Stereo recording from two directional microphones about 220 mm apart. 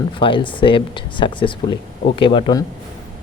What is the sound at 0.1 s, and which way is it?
Speech, 25° left (ahead or behind).